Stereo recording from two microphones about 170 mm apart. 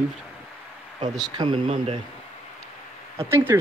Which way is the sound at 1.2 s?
25° right (ahead or behind).